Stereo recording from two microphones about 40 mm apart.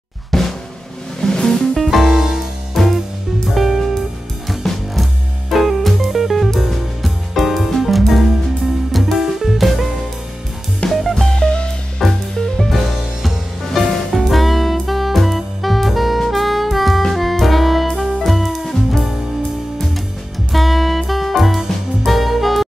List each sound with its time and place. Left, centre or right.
0.3 s drum: centre
1.2 s music: centre
1.8 s music: centre
2.8 s music: centre
10.9 s music: centre
11.3 s music: left
12.0 s music: centre
14.2 s saxophone: centre
17.1 s music: centre
20.5 s music: centre